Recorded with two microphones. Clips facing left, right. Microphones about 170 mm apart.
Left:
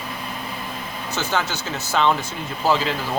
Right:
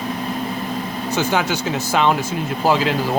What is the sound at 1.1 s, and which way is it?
Speech, 10° right (ahead or behind).